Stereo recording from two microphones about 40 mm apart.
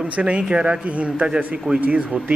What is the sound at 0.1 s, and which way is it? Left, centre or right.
A man's voice, right.